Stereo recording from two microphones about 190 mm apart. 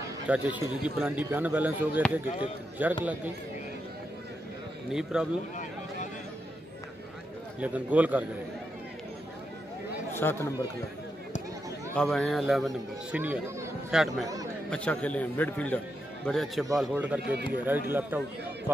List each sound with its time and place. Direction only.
0.3 s speech: 5° right (ahead or behind)
4.9 s speech: 5° right (ahead or behind)
7.6 s speech: 10° right (ahead or behind)
10.1 s a man's voice: 10° left (ahead or behind)
11.9 s speech: 5° left (ahead or behind)
14.2 s speech: 20° right (ahead or behind)
14.7 s a man's voice: 5° left (ahead or behind)
17.2 s speech: 55° right (ahead or behind)
17.6 s speech: 10° right (ahead or behind)